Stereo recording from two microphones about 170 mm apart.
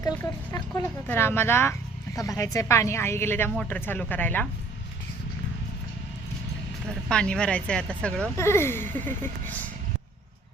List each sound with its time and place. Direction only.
0.5 s speech: 20° left (ahead or behind)
7.1 s speech: 5° left (ahead or behind)